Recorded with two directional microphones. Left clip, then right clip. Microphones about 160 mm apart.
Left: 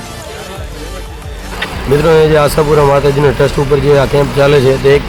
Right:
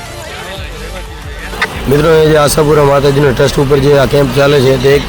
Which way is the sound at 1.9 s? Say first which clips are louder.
Even; 20° right (ahead or behind).